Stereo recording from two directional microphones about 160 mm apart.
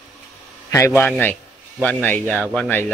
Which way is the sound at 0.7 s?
15° left (ahead or behind).